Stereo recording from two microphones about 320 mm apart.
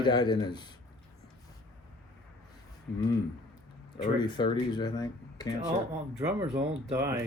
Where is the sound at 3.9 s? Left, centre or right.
Centre.